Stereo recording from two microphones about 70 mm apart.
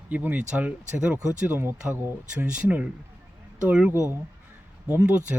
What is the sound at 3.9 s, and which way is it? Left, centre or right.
Speech, right.